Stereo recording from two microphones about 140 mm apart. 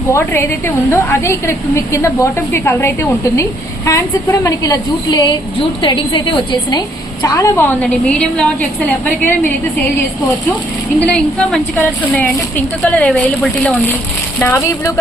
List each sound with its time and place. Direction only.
0.1 s a woman's voice: 20° left (ahead or behind)
11.0 s speech: 10° left (ahead or behind)
14.3 s speech: 15° left (ahead or behind)